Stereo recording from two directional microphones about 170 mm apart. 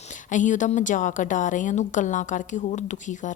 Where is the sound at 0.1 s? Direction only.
45° left (ahead or behind).